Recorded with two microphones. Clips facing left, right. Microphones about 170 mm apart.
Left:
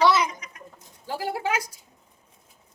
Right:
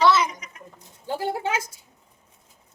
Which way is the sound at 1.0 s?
25° right (ahead or behind).